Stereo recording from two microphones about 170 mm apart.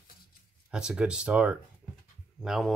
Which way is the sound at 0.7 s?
5° right (ahead or behind).